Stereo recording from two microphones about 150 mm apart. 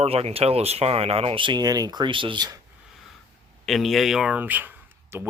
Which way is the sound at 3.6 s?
Centre (ahead or behind).